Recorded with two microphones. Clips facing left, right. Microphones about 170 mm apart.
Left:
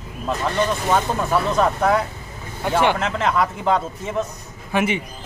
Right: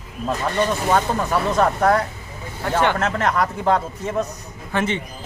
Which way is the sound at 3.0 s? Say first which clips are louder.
Even; centre (ahead or behind).